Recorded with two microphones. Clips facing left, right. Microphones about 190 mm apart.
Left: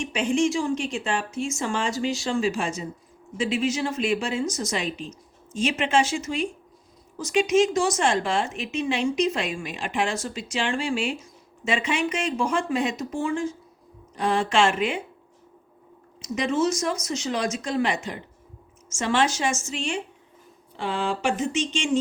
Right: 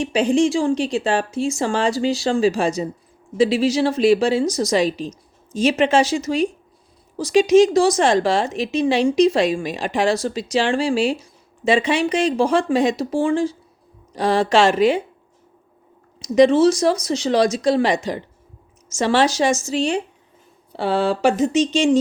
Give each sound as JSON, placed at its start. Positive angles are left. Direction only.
{"t": 0.0, "sound": "speech", "side_deg": -35}
{"t": 16.2, "sound": "speech", "side_deg": -35}